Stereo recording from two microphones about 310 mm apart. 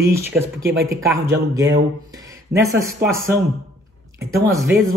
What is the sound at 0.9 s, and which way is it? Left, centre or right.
Speech, centre.